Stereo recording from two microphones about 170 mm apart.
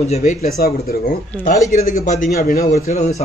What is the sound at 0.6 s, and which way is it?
Speech, 60° left (ahead or behind).